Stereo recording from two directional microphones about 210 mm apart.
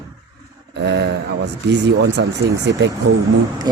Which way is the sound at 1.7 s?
55° right (ahead or behind).